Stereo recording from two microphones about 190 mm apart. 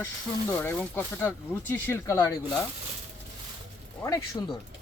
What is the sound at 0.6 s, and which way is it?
Speech, 10° left (ahead or behind).